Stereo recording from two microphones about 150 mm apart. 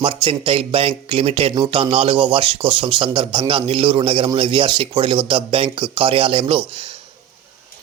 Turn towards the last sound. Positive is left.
turn(degrees=-35)  # may be behind; listen again after turning